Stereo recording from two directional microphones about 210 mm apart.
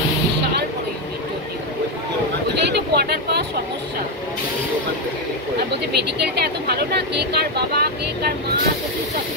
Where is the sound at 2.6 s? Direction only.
50° right (ahead or behind).